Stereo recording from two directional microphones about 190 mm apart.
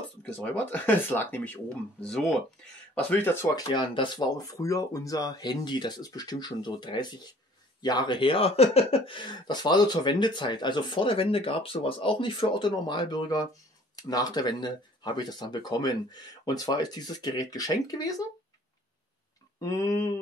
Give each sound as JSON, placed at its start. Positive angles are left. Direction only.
{"t": 0.2, "sound": "speech", "side_deg": 5}
{"t": 3.7, "sound": "speech", "side_deg": 25}
{"t": 19.6, "sound": "speech", "side_deg": 15}